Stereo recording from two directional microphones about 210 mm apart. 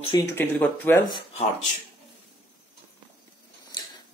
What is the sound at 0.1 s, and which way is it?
Speech, 10° left (ahead or behind).